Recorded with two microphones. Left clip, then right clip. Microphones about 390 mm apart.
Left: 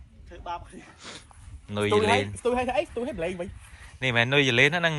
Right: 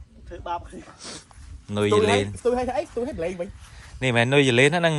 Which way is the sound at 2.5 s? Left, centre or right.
Centre.